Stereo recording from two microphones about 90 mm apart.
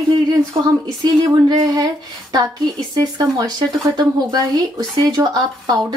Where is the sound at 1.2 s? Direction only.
45° right (ahead or behind).